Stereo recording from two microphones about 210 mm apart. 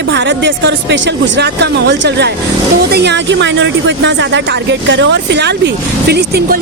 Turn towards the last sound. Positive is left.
turn(degrees=-50)  # may be behind; listen again after turning